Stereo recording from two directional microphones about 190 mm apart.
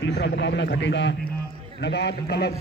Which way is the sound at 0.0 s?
65° left (ahead or behind).